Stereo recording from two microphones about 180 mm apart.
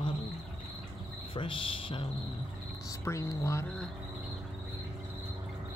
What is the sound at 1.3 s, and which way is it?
Speech, 30° left (ahead or behind).